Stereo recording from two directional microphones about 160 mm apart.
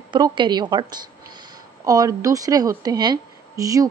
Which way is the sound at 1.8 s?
20° right (ahead or behind).